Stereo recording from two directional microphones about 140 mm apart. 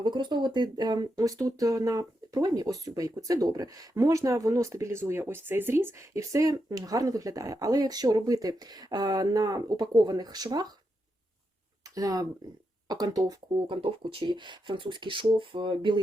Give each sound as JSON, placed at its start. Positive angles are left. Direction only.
{"t": 0.0, "sound": "speech", "side_deg": -35}
{"t": 11.9, "sound": "speech", "side_deg": -25}
{"t": 13.8, "sound": "speech", "side_deg": -40}